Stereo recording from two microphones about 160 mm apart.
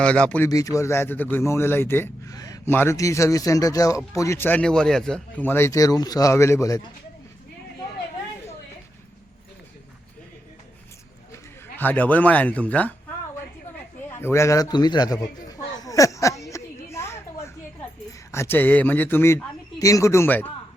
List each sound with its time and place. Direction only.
0.0 s a man's voice: 5° left (ahead or behind)
0.4 s a man's voice: 20° left (ahead or behind)
11.8 s a man's voice: 10° left (ahead or behind)
14.2 s a sound: 15° left (ahead or behind)
18.3 s a man's voice: 15° left (ahead or behind)